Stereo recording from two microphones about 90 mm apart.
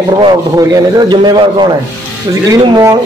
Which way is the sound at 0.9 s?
55° right (ahead or behind).